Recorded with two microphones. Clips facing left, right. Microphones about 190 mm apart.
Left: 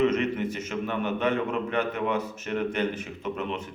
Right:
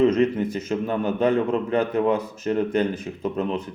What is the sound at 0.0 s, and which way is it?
Speech, 35° right (ahead or behind).